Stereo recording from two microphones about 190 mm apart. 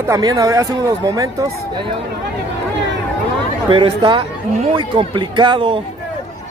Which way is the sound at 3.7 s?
25° right (ahead or behind).